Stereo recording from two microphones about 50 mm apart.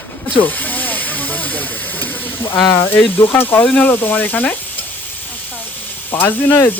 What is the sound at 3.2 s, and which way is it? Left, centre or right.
Speech, left.